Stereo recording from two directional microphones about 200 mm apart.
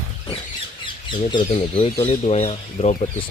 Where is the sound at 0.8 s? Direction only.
25° left (ahead or behind).